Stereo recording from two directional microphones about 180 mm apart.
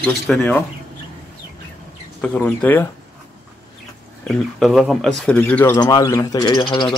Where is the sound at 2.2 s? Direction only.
10° left (ahead or behind).